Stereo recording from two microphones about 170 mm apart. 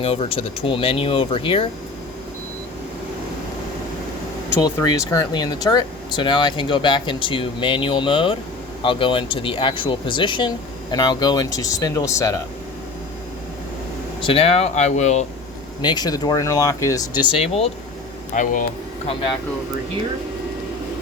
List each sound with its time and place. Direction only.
0.0 s speech: 35° left (ahead or behind)
4.6 s speech: 20° left (ahead or behind)
14.2 s speech: 30° left (ahead or behind)
15.8 s speech: 25° left (ahead or behind)
17.2 s speech: 35° left (ahead or behind)
18.3 s speech: 50° left (ahead or behind)